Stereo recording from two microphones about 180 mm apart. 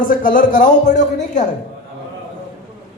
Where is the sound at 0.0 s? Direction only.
50° left (ahead or behind).